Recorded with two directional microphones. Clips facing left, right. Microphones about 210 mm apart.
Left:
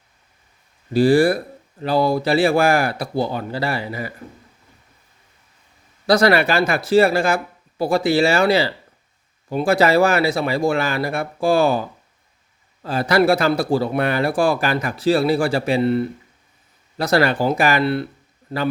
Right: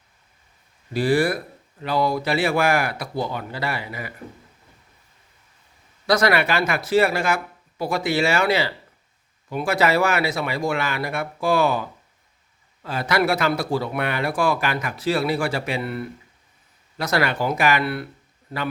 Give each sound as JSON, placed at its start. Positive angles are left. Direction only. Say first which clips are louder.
{"t": 0.9, "sound": "speech", "louder": "left 6 dB", "side_deg": 30}
{"t": 6.1, "sound": "speech", "louder": "left 4 dB", "side_deg": 30}